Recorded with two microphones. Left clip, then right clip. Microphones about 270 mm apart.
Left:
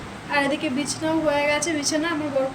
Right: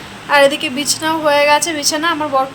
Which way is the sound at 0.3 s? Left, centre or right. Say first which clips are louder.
Right 11 dB; centre.